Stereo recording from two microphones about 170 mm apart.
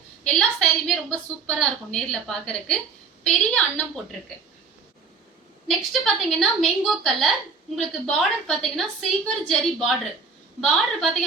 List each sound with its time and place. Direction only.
0.3 s a woman's voice: 5° left (ahead or behind)
5.6 s a woman's voice: centre (ahead or behind)